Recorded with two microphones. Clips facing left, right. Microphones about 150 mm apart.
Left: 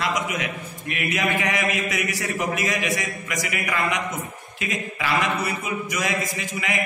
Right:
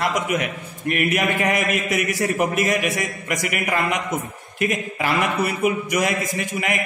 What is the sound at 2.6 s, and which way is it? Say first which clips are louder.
A man's voice: right 4 dB; 50° right (ahead or behind).